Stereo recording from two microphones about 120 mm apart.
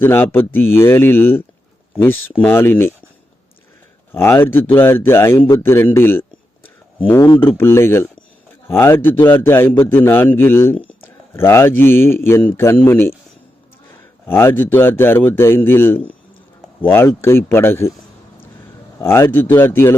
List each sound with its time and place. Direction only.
0.0 s speech: 15° left (ahead or behind)
4.1 s speech: 20° left (ahead or behind)
14.3 s speech: 20° left (ahead or behind)
18.9 s speech: 20° left (ahead or behind)